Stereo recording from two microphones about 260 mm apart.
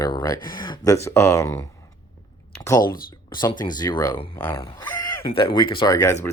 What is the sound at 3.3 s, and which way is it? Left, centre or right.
Speech, centre.